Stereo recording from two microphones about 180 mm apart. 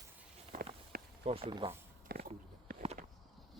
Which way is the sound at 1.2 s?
30° right (ahead or behind).